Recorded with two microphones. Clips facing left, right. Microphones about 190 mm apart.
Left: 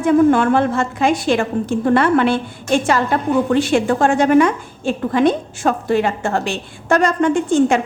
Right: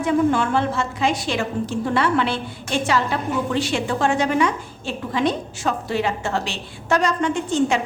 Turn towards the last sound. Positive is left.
turn(degrees=50)  # may be behind; listen again after turning